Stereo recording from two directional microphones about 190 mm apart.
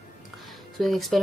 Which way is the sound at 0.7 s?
Centre (ahead or behind).